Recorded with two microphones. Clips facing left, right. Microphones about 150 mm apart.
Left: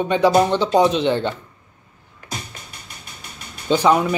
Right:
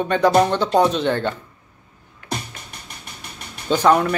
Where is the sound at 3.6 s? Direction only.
10° left (ahead or behind).